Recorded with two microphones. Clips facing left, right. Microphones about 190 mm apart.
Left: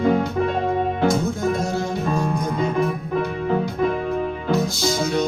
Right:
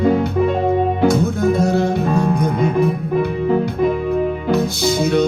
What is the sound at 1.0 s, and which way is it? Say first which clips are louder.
Music: right 5 dB; 60° right (ahead or behind).